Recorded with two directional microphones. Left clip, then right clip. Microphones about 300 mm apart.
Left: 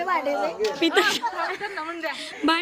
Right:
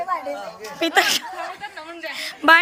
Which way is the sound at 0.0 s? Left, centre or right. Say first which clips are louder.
Left 1 dB; left.